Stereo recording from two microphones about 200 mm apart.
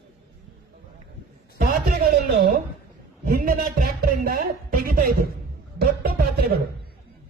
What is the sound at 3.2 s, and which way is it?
Speech, 45° right (ahead or behind).